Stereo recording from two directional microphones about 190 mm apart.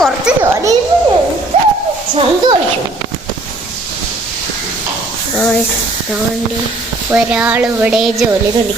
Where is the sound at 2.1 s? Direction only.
25° right (ahead or behind).